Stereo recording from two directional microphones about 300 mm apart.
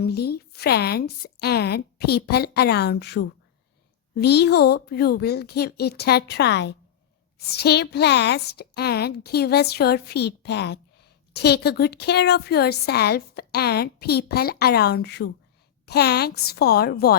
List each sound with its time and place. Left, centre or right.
0.0 s a woman's voice: left